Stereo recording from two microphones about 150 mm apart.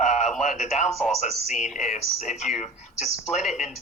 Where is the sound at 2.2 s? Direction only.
50° left (ahead or behind).